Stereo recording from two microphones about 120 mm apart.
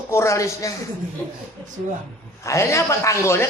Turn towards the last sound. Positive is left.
turn(degrees=20)  # may be behind; listen again after turning